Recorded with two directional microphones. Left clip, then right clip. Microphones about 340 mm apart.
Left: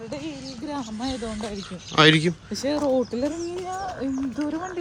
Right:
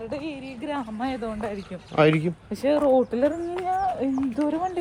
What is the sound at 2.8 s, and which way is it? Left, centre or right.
Speech, right.